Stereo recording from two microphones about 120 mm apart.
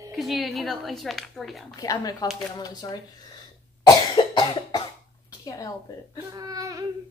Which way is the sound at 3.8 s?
40° left (ahead or behind).